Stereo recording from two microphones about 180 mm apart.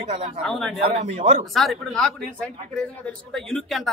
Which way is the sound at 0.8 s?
35° right (ahead or behind).